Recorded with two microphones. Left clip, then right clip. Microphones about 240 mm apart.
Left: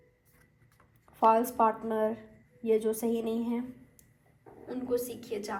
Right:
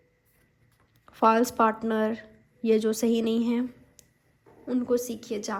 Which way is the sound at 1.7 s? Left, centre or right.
Left.